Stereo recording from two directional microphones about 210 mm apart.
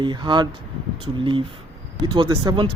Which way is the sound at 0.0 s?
20° right (ahead or behind).